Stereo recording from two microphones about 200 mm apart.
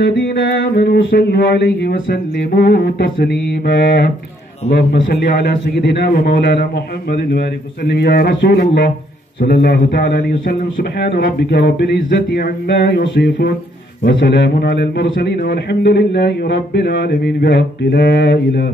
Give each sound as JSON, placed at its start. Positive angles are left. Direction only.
{"t": 0.0, "sound": "a man's voice", "side_deg": 60}